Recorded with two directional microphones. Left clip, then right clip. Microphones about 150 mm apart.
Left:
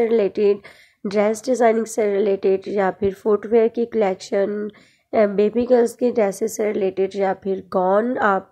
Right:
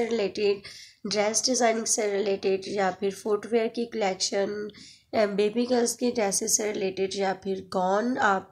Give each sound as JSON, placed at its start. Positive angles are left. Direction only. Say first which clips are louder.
{"t": 0.0, "sound": "a woman's voice", "louder": "left 9 dB", "side_deg": 40}
{"t": 4.5, "sound": "speech", "louder": "left 7 dB", "side_deg": 35}